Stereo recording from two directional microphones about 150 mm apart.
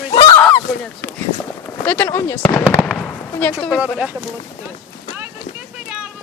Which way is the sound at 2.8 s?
10° left (ahead or behind).